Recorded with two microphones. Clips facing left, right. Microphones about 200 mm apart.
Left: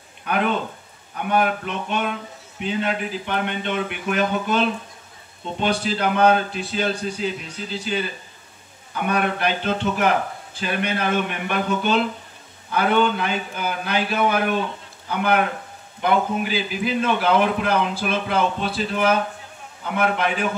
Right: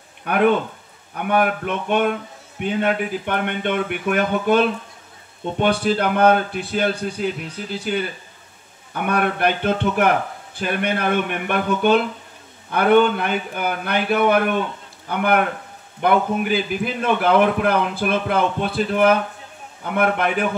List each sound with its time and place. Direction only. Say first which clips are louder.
0.2 s a man's voice: right 5 dB; 55° right (ahead or behind)